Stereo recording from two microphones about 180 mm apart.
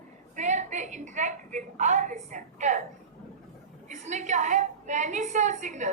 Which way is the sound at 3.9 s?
40° right (ahead or behind).